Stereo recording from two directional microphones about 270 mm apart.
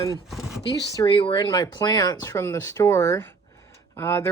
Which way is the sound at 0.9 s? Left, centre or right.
Centre.